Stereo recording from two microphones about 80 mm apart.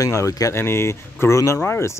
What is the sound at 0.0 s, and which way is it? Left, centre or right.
Speech, left.